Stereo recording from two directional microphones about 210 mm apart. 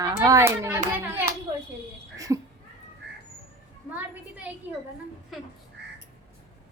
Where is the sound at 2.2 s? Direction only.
15° right (ahead or behind).